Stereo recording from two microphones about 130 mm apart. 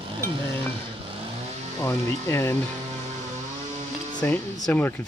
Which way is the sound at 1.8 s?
20° left (ahead or behind).